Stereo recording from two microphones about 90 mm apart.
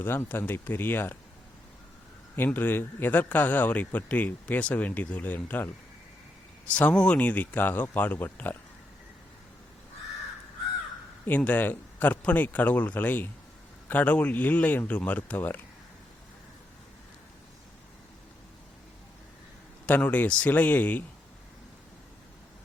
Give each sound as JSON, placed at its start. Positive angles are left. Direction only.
{"t": 0.0, "sound": "speech", "side_deg": 25}
{"t": 2.3, "sound": "speech", "side_deg": 20}
{"t": 11.3, "sound": "speech", "side_deg": 20}
{"t": 19.8, "sound": "speech", "side_deg": 15}